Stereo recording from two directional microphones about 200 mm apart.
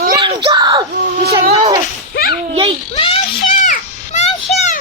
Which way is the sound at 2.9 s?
30° left (ahead or behind).